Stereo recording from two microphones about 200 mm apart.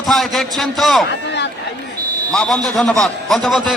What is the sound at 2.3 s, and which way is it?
A man's voice, 5° left (ahead or behind).